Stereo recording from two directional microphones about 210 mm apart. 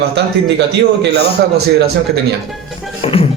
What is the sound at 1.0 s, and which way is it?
Speech, 50° right (ahead or behind).